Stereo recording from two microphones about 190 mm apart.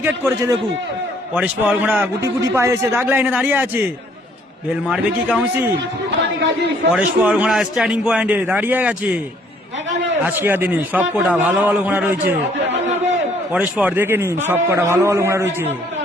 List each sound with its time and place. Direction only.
0.0 s a man's voice: 10° right (ahead or behind)
4.9 s a man's voice: 5° right (ahead or behind)
6.9 s a man's voice: 10° right (ahead or behind)
10.2 s a man's voice: 10° right (ahead or behind)
12.6 s a sound: 70° right (ahead or behind)
13.5 s a man's voice: 5° right (ahead or behind)